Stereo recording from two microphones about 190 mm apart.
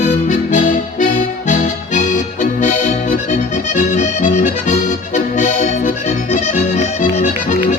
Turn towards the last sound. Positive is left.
turn(degrees=40)  # may be behind; listen again after turning